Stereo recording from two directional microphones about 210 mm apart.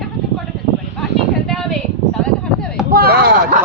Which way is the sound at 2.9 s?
45° right (ahead or behind).